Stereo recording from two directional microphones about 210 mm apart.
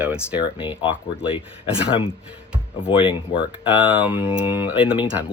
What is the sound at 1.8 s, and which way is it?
Speech, 25° left (ahead or behind).